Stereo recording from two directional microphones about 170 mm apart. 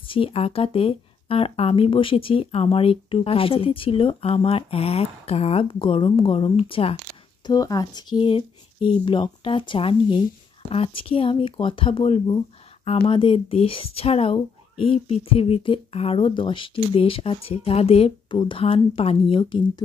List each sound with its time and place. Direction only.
0.0 s speech: 30° left (ahead or behind)
7.4 s speech: 20° left (ahead or behind)